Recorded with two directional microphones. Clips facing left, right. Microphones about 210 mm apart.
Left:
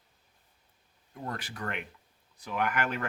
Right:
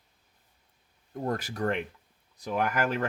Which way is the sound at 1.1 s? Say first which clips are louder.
Right 7 dB; 40° right (ahead or behind).